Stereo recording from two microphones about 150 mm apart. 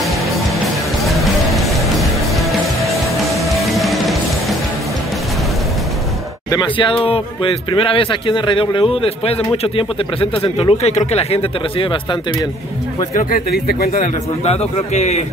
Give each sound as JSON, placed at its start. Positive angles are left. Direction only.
{"t": 1.0, "sound": "music", "side_deg": 0}
{"t": 6.5, "sound": "speech", "side_deg": 30}
{"t": 13.1, "sound": "speech", "side_deg": 80}
{"t": 14.4, "sound": "speech", "side_deg": 45}